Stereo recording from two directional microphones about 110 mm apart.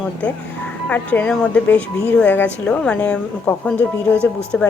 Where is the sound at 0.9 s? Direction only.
15° left (ahead or behind).